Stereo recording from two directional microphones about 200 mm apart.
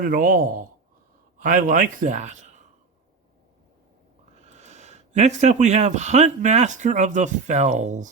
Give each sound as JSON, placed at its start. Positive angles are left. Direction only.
{"t": 0.0, "sound": "speech", "side_deg": -45}
{"t": 4.5, "sound": "speech", "side_deg": -35}